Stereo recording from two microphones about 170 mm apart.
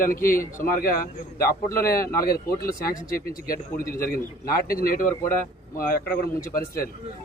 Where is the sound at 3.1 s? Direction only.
60° left (ahead or behind).